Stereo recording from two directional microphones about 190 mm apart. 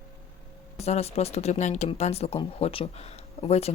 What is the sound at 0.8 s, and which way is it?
Speech, 35° left (ahead or behind).